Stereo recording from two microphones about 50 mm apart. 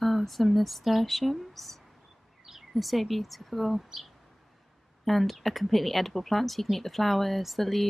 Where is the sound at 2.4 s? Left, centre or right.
Centre.